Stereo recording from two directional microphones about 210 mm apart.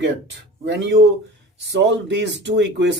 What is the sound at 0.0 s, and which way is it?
Speech, 55° right (ahead or behind).